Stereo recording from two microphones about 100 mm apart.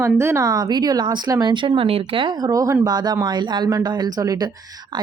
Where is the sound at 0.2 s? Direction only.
30° right (ahead or behind); by 2.3 s 65° right (ahead or behind).